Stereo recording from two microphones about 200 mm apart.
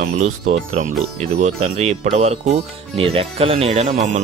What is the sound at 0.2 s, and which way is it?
Speech, 40° right (ahead or behind).